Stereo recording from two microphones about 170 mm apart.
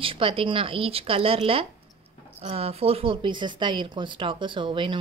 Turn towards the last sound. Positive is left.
turn(degrees=-30)  # may be behind; listen again after turning